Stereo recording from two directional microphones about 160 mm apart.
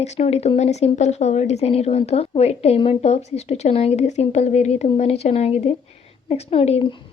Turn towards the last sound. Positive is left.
turn(degrees=35)  # may be behind; listen again after turning